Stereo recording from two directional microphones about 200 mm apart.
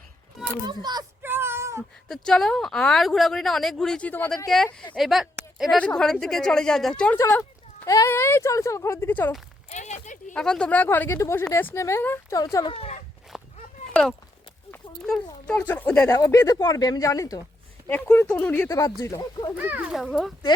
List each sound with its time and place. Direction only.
0.7 s a sound: 20° right (ahead or behind)
2.0 s speech: centre (ahead or behind)
7.2 s speech: 15° left (ahead or behind)
9.6 s a sound: 35° left (ahead or behind)
10.3 s speech: 5° left (ahead or behind)
12.7 s speech: 30° left (ahead or behind)
13.3 s walk: centre (ahead or behind)
13.9 s speech: centre (ahead or behind)
18.7 s speech: 15° left (ahead or behind)
19.5 s speech: 10° right (ahead or behind)